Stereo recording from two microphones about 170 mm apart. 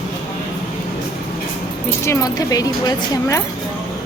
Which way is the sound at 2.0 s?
20° left (ahead or behind).